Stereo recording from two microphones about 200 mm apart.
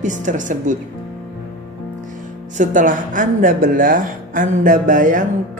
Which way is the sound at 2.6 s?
40° right (ahead or behind).